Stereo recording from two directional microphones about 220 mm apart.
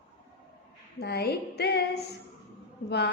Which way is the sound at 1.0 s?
45° left (ahead or behind).